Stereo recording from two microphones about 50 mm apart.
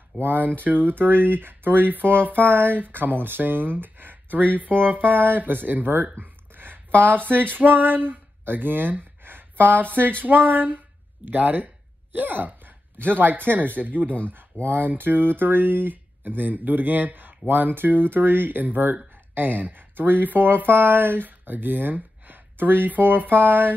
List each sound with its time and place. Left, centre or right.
0.2 s speech: right
6.1 s a sound: right
10.2 s speech: right